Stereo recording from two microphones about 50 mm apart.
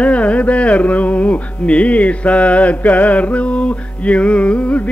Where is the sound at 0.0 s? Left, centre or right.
Left.